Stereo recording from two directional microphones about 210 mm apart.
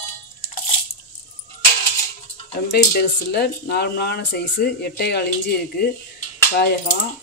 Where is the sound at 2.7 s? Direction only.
50° left (ahead or behind).